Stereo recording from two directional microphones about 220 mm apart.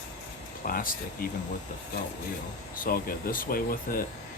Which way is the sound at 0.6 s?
40° left (ahead or behind).